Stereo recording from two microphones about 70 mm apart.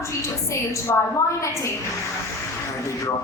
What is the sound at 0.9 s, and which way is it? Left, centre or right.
Music, left.